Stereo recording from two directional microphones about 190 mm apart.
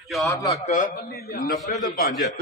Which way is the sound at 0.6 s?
40° left (ahead or behind).